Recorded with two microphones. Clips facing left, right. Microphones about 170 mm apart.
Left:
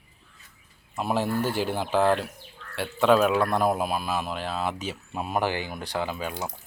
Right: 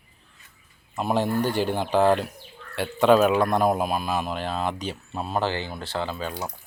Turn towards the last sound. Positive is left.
turn(degrees=20)  # may be behind; listen again after turning